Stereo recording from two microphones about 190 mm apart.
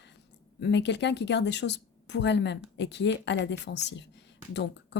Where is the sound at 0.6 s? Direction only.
65° left (ahead or behind).